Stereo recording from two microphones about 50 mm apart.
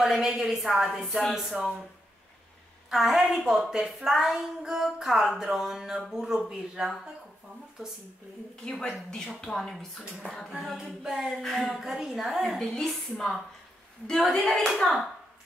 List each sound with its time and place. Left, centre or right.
0.0 s a woman's voice: centre
2.9 s a woman's voice: centre
8.6 s speech: centre
10.6 s a woman's voice: centre
12.5 s a woman's voice: centre